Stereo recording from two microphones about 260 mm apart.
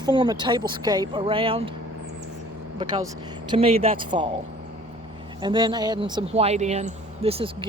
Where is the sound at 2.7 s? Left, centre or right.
Centre.